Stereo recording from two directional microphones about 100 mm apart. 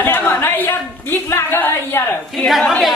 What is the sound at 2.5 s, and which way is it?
Speech, centre (ahead or behind).